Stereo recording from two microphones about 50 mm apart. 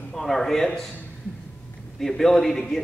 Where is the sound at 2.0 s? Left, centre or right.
Centre.